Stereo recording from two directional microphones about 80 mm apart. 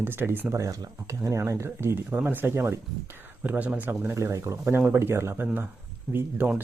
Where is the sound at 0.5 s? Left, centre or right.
Right.